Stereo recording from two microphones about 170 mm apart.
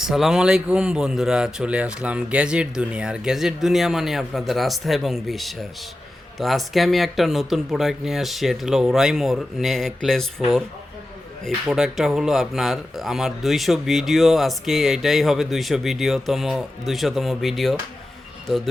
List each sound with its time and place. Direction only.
0.0 s speech: centre (ahead or behind)